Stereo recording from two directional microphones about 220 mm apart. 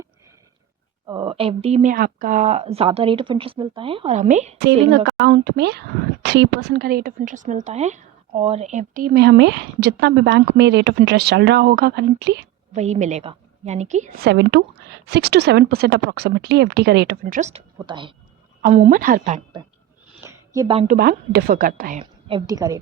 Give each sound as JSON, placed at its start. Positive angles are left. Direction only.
{"t": 1.0, "sound": "speech", "side_deg": -20}
{"t": 4.5, "sound": "a woman's voice", "side_deg": -50}
{"t": 12.7, "sound": "a woman's voice", "side_deg": -30}
{"t": 17.8, "sound": "speech", "side_deg": -20}
{"t": 18.6, "sound": "a woman's voice", "side_deg": -35}
{"t": 20.2, "sound": "a sound", "side_deg": -15}
{"t": 20.7, "sound": "a woman's voice", "side_deg": -35}
{"t": 22.3, "sound": "a woman's voice", "side_deg": -20}